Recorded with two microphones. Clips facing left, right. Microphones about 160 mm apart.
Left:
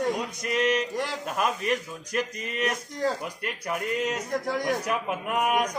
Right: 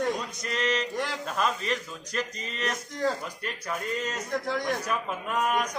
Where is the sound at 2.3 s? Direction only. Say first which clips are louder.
Left 5 dB; 55° left (ahead or behind).